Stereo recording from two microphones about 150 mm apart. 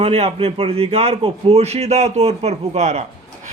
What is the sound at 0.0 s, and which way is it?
Speech, 45° right (ahead or behind).